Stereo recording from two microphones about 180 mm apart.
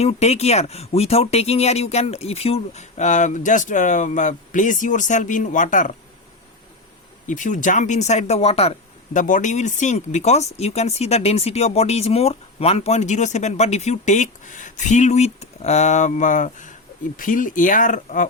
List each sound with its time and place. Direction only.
0.0 s speech: 35° left (ahead or behind)
7.3 s speech: 45° left (ahead or behind)